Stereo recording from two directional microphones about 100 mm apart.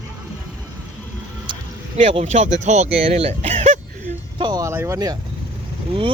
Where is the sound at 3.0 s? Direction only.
85° right.